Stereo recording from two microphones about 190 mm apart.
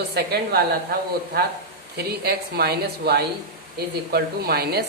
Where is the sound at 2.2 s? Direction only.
55° right (ahead or behind).